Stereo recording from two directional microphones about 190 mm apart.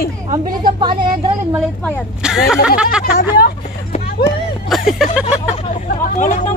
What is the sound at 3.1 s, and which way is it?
Speech, 55° left (ahead or behind).